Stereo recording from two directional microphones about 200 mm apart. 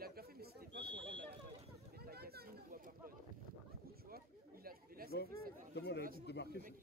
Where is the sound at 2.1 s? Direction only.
50° right (ahead or behind).